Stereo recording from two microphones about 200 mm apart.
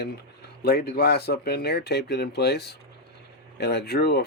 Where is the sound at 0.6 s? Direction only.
50° left (ahead or behind).